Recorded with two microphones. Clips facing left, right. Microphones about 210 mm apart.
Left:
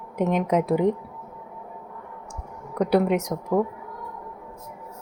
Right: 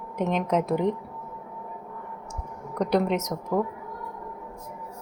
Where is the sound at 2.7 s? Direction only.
5° left (ahead or behind).